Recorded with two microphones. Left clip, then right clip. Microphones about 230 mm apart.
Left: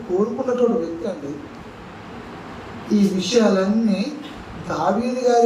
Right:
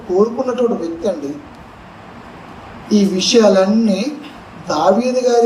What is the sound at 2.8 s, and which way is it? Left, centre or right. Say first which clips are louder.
A man's voice: right 6 dB; right.